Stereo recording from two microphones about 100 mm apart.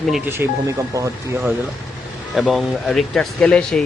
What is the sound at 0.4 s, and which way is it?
Speech, 20° right (ahead or behind).